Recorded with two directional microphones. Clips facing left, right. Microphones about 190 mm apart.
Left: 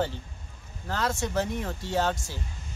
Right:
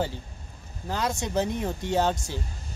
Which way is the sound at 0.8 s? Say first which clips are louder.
Even; 15° right (ahead or behind).